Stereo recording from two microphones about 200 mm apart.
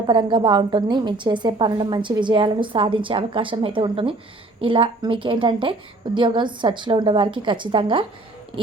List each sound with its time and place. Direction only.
0.0 s a woman's voice: 25° right (ahead or behind)